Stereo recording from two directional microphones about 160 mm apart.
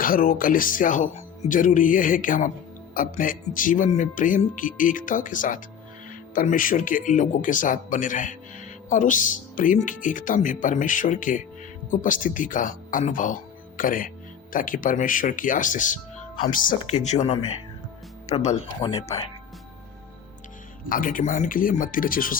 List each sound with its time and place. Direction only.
0.0 s speech: 60° left (ahead or behind); by 19.0 s 30° left (ahead or behind)
20.9 s speech: 60° left (ahead or behind)